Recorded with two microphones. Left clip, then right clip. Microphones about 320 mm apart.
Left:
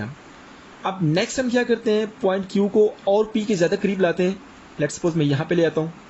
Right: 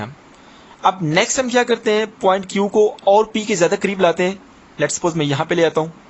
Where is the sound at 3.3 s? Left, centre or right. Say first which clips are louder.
Right 4 dB; centre.